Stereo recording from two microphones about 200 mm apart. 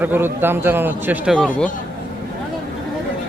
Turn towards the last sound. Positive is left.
turn(degrees=5)  # may be behind; listen again after turning